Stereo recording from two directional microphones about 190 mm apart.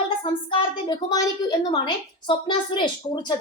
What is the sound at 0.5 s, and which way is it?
A woman's voice, 20° left (ahead or behind).